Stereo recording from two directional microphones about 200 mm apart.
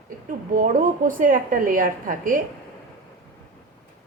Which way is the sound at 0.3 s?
40° right (ahead or behind).